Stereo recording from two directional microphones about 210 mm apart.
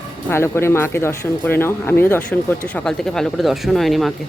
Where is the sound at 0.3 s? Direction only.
10° left (ahead or behind).